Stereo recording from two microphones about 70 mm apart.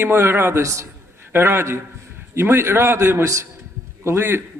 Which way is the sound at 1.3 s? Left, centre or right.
Right.